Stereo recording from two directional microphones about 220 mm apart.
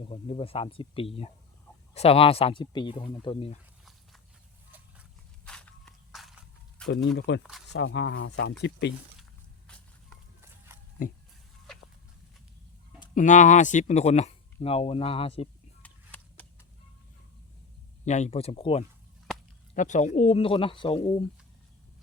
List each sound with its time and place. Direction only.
0.1 s speech: 25° left (ahead or behind)
5.5 s walk: 5° left (ahead or behind)
6.8 s speech: 60° left (ahead or behind)
9.6 s a sound: 5° left (ahead or behind)
11.0 s speech: 40° left (ahead or behind)
13.1 s speech: 35° left (ahead or behind)
15.8 s a sound: 5° left (ahead or behind)
18.0 s speech: 30° left (ahead or behind)